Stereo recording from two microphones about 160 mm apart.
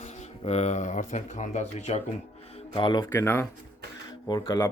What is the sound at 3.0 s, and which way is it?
Speech, 15° left (ahead or behind).